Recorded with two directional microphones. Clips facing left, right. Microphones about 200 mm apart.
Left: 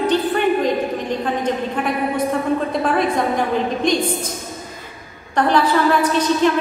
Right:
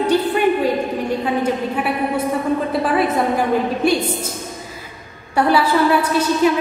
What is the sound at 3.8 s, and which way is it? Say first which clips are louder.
Speech: right 1 dB; 10° right (ahead or behind).